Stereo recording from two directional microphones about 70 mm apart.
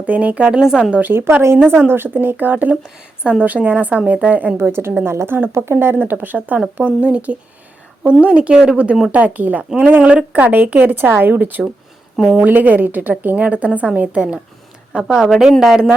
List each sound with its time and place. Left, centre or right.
0.0 s speech: centre
1.1 s a woman's voice: right
10.0 s a woman's voice: centre
12.1 s speech: centre
12.4 s a woman's voice: right
15.2 s a woman's voice: centre